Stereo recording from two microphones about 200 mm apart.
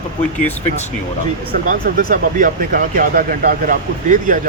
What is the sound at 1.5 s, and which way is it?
Speech, 45° right (ahead or behind).